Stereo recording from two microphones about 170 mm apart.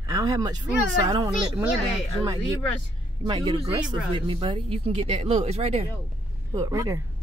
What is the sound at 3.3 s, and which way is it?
Speech, 30° right (ahead or behind).